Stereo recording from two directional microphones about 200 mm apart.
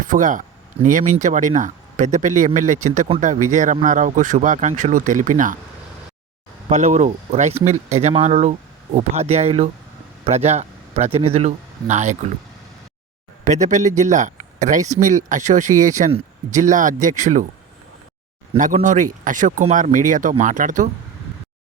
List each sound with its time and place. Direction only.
0.0 s speech: 40° right (ahead or behind)
6.7 s speech: 35° right (ahead or behind)
13.4 s speech: 40° right (ahead or behind)
18.5 s speech: 40° right (ahead or behind)